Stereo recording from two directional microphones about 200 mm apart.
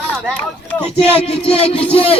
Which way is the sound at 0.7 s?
5° left (ahead or behind).